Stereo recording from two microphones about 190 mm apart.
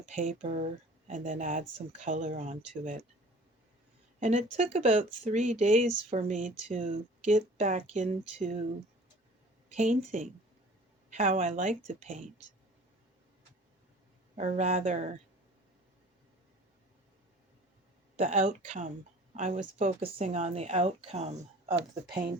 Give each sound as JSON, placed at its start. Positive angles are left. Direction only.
{"t": 0.0, "sound": "speech", "side_deg": -40}
{"t": 4.2, "sound": "speech", "side_deg": -40}
{"t": 9.7, "sound": "speech", "side_deg": -40}
{"t": 14.3, "sound": "speech", "side_deg": -35}
{"t": 18.2, "sound": "speech", "side_deg": -40}